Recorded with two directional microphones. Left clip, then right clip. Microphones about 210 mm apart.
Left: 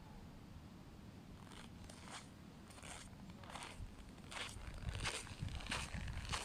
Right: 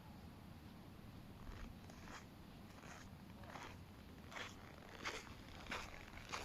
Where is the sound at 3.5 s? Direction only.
40° left (ahead or behind).